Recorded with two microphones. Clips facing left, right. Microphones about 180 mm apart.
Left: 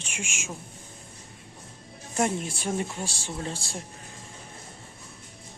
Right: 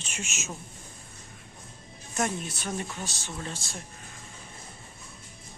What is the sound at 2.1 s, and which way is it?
Speech, 25° left (ahead or behind).